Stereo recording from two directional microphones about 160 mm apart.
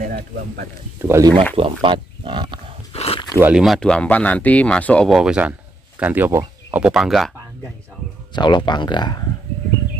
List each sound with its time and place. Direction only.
0.0 s speech: 60° right (ahead or behind)
1.0 s speech: 20° right (ahead or behind)
1.6 s speech: 30° right (ahead or behind)
2.9 s a sound: 40° left (ahead or behind)
3.3 s speech: 10° right (ahead or behind)
3.6 s speech: centre (ahead or behind)
8.4 s speech: 30° left (ahead or behind)